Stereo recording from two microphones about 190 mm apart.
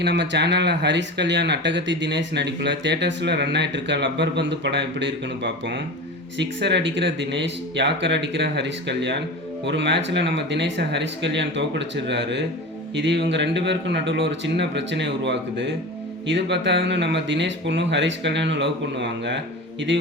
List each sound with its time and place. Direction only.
0.0 s speech: 65° right (ahead or behind)